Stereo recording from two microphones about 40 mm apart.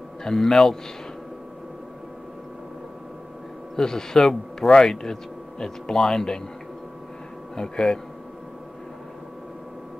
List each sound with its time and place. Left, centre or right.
0.2 s a man's voice: centre
3.7 s a man's voice: centre
7.5 s a man's voice: centre